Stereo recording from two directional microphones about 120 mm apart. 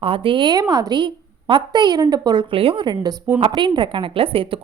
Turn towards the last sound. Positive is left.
turn(degrees=-50)  # may be behind; listen again after turning